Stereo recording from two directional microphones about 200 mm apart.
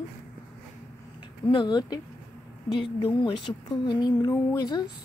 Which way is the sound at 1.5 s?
20° left (ahead or behind).